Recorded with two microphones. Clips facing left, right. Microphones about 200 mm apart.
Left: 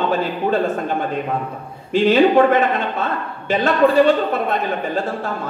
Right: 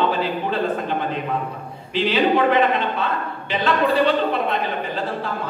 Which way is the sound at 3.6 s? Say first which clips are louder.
Left 5 dB; 45° left (ahead or behind).